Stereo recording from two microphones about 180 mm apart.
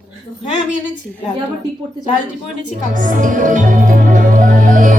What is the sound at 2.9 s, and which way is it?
Music, 45° right (ahead or behind).